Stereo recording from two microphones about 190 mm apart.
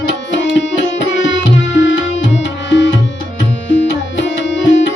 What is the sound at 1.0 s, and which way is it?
Music, 80° left.